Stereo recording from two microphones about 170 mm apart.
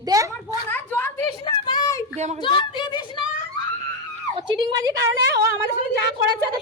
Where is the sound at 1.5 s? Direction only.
25° left (ahead or behind).